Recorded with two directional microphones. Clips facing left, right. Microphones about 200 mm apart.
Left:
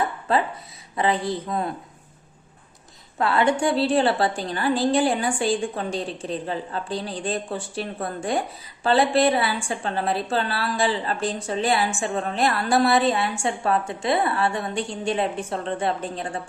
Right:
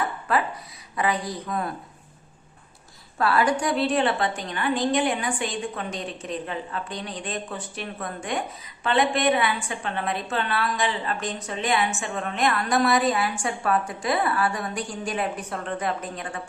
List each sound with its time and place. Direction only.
0.3 s speech: 25° left (ahead or behind)
3.2 s a woman's voice: 25° left (ahead or behind)